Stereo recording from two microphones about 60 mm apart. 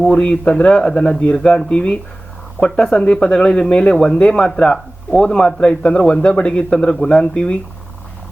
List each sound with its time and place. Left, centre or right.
0.1 s speech: centre